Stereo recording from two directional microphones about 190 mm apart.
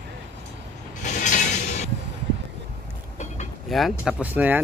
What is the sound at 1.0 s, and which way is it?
Mechanisms, 40° left (ahead or behind).